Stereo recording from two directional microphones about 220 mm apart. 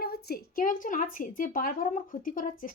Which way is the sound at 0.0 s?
45° left (ahead or behind).